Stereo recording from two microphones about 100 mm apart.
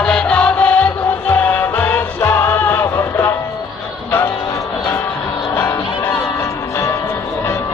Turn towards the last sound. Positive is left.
turn(degrees=25)  # may be behind; listen again after turning